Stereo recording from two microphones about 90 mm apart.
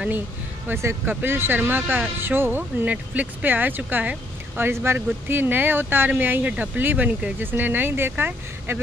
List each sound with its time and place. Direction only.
0.7 s speech: 25° right (ahead or behind)